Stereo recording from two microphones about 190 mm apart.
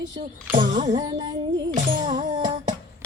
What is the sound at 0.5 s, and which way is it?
Music, 25° right (ahead or behind).